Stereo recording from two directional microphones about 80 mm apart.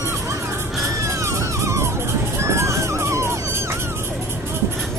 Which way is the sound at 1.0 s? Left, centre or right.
Right.